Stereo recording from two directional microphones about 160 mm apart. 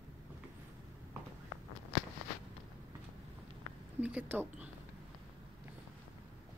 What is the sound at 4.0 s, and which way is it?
Speech, 10° right (ahead or behind).